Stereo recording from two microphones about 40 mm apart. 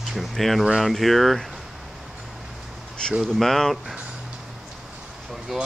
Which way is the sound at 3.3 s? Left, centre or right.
Centre.